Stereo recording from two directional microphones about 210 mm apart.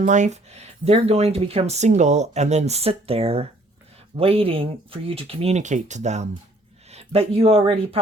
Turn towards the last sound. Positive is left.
turn(degrees=-30)  # may be behind; listen again after turning